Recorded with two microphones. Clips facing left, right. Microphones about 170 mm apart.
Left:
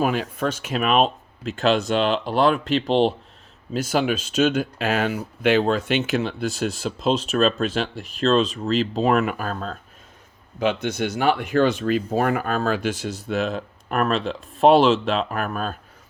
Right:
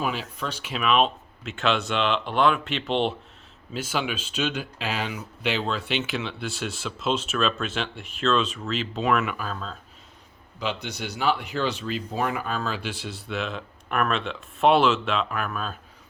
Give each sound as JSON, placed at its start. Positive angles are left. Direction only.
{"t": 0.0, "sound": "speech", "side_deg": 50}